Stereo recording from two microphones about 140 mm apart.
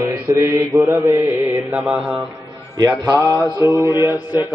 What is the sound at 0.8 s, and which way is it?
Mantra, 15° right (ahead or behind).